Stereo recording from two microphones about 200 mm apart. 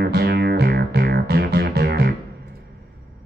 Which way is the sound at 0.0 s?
55° right (ahead or behind).